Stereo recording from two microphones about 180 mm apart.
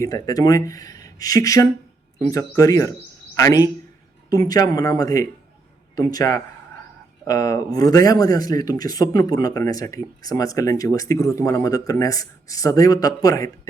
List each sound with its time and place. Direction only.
0.0 s speech: 20° left (ahead or behind)